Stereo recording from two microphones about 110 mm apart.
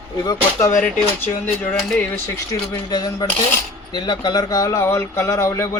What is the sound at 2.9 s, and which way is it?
Speech, 40° left (ahead or behind).